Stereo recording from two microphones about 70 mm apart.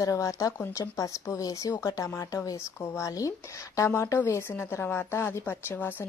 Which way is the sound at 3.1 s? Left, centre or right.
Left.